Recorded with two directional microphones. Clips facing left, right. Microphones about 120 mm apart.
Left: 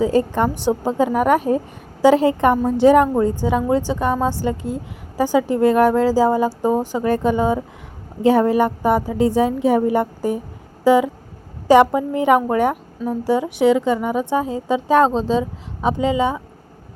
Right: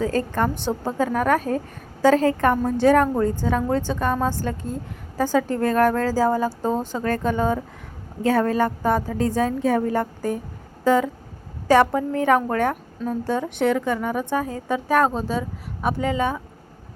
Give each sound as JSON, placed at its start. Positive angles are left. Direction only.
{"t": 0.0, "sound": "a woman's voice", "side_deg": 15}